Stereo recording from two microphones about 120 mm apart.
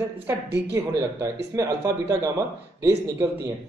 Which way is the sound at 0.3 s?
25° right (ahead or behind).